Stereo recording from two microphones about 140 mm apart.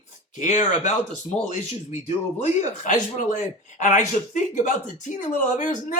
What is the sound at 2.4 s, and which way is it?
Speech, 60° left (ahead or behind).